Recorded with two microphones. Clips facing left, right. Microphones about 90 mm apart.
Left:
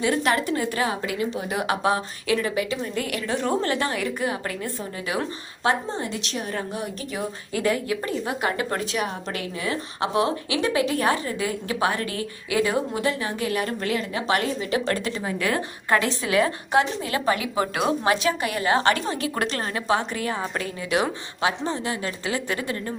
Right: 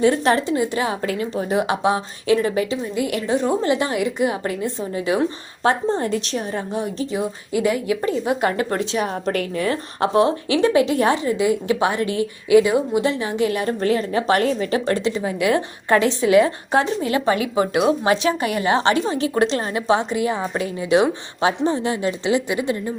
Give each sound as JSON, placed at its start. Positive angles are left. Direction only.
{"t": 0.0, "sound": "a woman's voice", "side_deg": -30}
{"t": 0.5, "sound": "a woman's voice", "side_deg": -20}
{"t": 1.0, "sound": "a woman's voice", "side_deg": -35}
{"t": 6.0, "sound": "a woman's voice", "side_deg": -40}
{"t": 6.5, "sound": "a woman's voice", "side_deg": -25}
{"t": 7.5, "sound": "a woman's voice", "side_deg": -15}
{"t": 14.8, "sound": "a woman's voice", "side_deg": -25}
{"t": 15.9, "sound": "a woman's voice", "side_deg": -30}